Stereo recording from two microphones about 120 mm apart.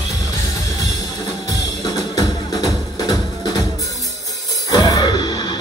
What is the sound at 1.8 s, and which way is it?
Music, 30° left (ahead or behind).